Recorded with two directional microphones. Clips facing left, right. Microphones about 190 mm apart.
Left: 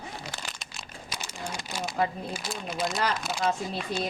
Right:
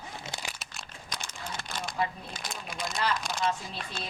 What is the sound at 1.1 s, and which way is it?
Crumpling, 10° left (ahead or behind).